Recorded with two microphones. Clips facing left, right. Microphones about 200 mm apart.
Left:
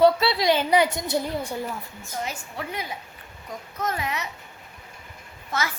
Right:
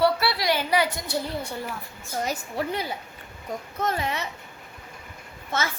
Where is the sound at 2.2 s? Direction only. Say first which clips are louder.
Right 4 dB; 40° right (ahead or behind).